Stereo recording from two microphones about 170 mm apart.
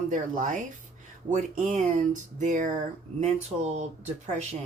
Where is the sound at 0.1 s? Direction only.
50° right (ahead or behind).